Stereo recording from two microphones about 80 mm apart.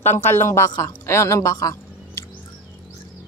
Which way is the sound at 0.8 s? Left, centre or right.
Left.